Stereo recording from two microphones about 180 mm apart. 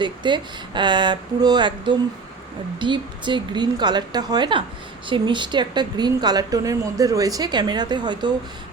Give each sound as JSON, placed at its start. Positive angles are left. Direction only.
{"t": 0.0, "sound": "a woman's voice", "side_deg": -25}